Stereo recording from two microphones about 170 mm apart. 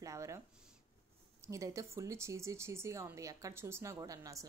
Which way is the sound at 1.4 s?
15° right (ahead or behind).